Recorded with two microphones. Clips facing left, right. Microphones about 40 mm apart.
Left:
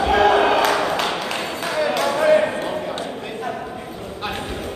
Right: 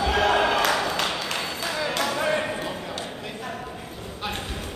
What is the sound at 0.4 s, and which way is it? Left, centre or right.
Basketball bounce, left.